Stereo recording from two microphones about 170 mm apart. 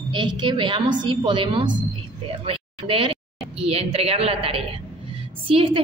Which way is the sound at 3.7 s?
35° right (ahead or behind).